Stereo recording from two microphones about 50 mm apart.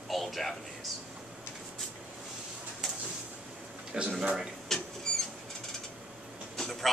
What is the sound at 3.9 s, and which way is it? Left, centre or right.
Speech, right.